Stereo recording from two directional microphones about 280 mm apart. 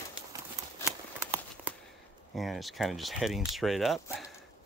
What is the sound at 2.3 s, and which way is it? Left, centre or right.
Speech, centre.